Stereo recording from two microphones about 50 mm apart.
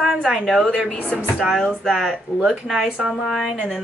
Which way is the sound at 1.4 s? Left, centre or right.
Centre.